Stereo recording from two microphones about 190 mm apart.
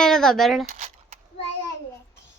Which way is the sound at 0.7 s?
40° right (ahead or behind).